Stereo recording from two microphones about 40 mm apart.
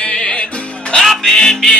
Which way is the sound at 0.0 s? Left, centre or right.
Left.